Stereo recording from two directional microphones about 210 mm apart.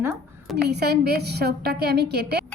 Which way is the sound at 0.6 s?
50° right (ahead or behind).